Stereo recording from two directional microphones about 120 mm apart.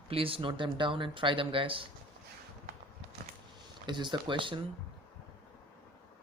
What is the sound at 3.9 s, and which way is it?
Speech, 40° right (ahead or behind).